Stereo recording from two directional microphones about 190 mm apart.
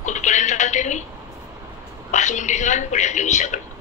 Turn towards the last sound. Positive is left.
turn(degrees=40)  # may be behind; listen again after turning